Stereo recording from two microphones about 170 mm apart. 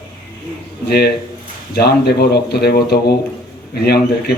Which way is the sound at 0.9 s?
70° left (ahead or behind).